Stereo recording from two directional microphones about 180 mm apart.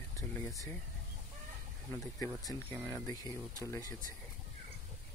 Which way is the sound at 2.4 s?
15° left (ahead or behind).